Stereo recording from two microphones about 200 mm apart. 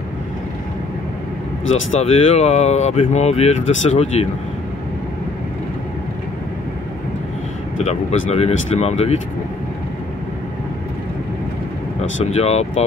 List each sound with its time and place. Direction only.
1.7 s speech: 35° left (ahead or behind)
7.8 s speech: 35° left (ahead or behind)
12.0 s speech: 30° left (ahead or behind)